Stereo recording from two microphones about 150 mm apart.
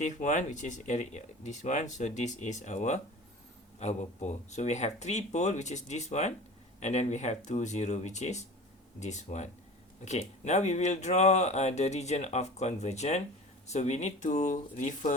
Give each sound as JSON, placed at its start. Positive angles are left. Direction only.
{"t": 0.0, "sound": "speech", "side_deg": 55}